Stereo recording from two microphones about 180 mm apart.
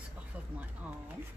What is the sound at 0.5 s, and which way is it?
Speech, 10° right (ahead or behind).